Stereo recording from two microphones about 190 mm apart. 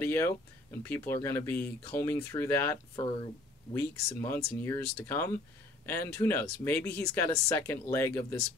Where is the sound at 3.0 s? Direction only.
25° left (ahead or behind).